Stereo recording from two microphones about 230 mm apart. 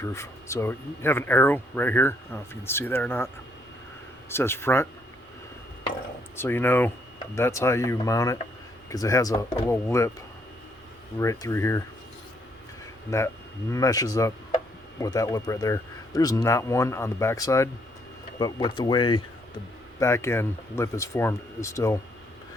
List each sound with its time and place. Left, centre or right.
0.0 s speech: centre
4.3 s speech: centre
6.3 s speech: centre
11.2 s speech: centre
13.1 s speech: centre